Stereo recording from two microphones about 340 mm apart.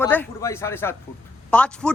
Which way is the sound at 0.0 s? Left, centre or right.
Centre.